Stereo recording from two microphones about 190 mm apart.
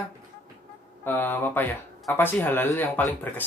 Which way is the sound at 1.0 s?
10° left (ahead or behind).